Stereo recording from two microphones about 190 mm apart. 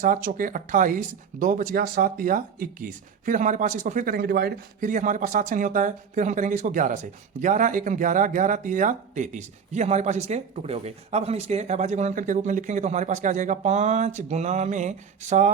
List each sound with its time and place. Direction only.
0.0 s speech: 45° right (ahead or behind)